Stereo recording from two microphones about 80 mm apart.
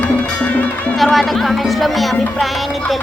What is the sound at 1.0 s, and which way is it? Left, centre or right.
Speech, centre.